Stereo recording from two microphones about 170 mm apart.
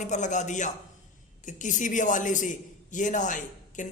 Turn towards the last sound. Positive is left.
turn(degrees=45)  # may be behind; listen again after turning